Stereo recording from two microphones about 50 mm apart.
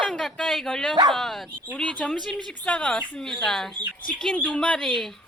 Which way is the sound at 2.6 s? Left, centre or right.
Left.